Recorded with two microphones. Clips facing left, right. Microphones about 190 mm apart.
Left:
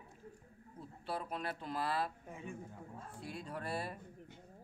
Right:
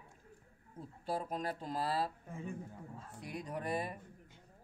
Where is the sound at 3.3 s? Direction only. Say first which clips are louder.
Right 4 dB; 15° right (ahead or behind).